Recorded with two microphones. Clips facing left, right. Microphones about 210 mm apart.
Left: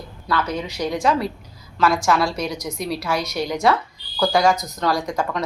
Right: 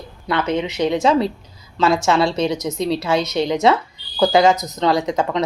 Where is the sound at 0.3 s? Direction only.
25° right (ahead or behind).